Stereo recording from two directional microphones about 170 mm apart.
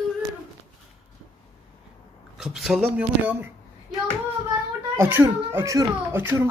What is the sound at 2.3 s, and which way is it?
Speech, centre (ahead or behind).